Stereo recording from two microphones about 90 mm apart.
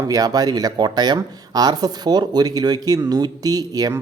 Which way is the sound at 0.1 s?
45° right (ahead or behind).